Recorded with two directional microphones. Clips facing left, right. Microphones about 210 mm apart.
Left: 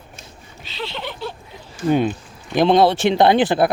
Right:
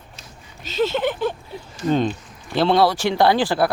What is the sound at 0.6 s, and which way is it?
Speech, 45° right (ahead or behind).